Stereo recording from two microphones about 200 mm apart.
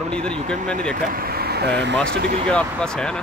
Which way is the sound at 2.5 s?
5° left (ahead or behind).